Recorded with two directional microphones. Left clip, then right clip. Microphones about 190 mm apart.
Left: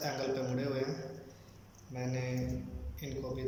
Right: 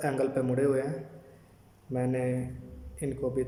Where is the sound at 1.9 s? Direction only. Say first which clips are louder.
Right 9 dB; 50° right (ahead or behind).